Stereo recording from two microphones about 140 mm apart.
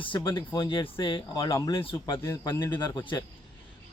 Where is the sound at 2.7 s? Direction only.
35° left (ahead or behind).